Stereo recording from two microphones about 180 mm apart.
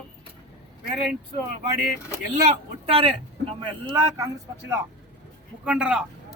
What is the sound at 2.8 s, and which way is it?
Speech, 30° right (ahead or behind).